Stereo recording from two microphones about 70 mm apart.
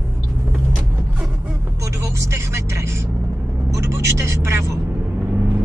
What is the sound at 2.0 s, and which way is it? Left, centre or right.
Speech, right.